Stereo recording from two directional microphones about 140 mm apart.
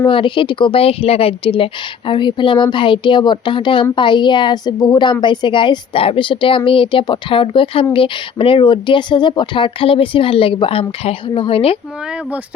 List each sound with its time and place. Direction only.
0.1 s speech: 35° left (ahead or behind)